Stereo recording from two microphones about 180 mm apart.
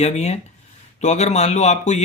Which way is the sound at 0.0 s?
40° left (ahead or behind).